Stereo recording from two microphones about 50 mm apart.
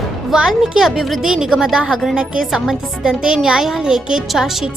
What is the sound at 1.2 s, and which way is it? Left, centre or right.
A child's voice, centre.